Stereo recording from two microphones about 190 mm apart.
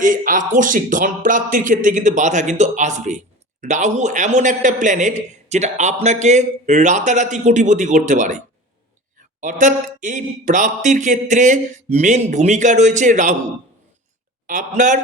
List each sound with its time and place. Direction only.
0.0 s speech: 45° right (ahead or behind)
9.4 s speech: 40° right (ahead or behind)
14.4 s speech: 40° right (ahead or behind)